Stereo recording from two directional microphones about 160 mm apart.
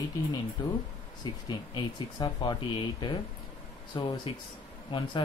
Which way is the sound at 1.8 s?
30° left (ahead or behind).